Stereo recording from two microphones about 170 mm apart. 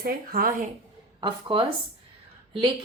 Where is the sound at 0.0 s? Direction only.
60° right (ahead or behind).